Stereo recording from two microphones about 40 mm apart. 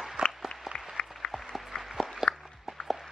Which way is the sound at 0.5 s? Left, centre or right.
Left.